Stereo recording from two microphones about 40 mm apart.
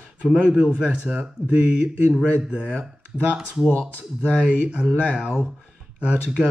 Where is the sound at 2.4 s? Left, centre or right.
Centre.